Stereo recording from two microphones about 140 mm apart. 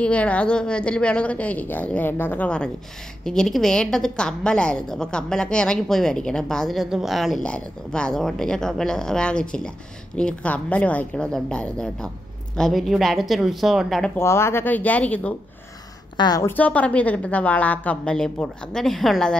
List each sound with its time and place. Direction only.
0.0 s a woman's voice: 10° left (ahead or behind)
14.1 s a woman's voice: 20° left (ahead or behind)
16.2 s a woman's voice: 30° left (ahead or behind)
16.4 s a woman's voice: 10° left (ahead or behind)